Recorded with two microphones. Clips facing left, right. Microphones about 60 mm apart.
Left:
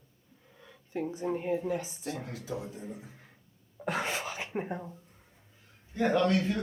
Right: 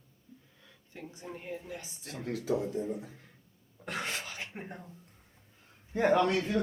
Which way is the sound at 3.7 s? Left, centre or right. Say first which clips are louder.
Left 4 dB; left.